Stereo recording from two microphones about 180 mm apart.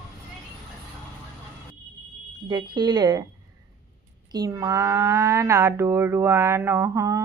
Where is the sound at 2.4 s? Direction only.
25° right (ahead or behind).